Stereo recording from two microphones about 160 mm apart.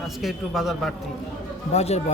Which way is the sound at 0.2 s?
Centre (ahead or behind).